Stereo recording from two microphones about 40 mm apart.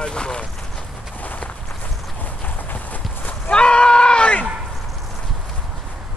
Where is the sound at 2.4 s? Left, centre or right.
Left.